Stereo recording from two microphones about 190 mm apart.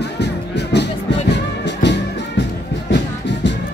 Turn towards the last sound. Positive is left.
turn(degrees=65)  # may be behind; listen again after turning